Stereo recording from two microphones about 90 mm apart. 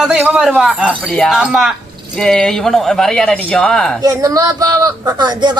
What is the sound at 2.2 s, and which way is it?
A man's voice, 5° left (ahead or behind).